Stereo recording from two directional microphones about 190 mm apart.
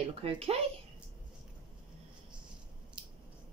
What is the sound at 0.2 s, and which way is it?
Speech, 30° right (ahead or behind).